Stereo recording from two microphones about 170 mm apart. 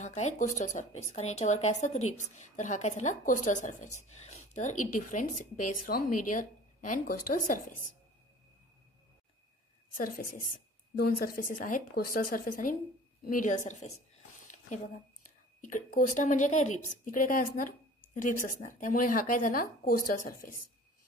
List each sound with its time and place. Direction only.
0.0 s speech: 45° left (ahead or behind)
9.9 s a woman's voice: 55° left (ahead or behind)
15.6 s speech: 50° left (ahead or behind)